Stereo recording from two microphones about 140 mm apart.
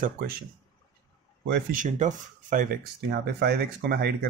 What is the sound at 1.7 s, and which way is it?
Speech, 65° right (ahead or behind).